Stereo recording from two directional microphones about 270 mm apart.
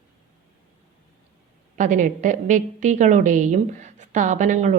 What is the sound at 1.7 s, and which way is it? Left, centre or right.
A woman's voice, right.